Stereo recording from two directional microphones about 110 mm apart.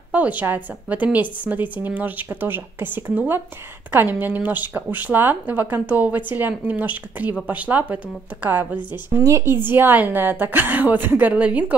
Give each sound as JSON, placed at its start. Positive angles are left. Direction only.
{"t": 0.1, "sound": "speech", "side_deg": -15}
{"t": 9.2, "sound": "speech", "side_deg": -25}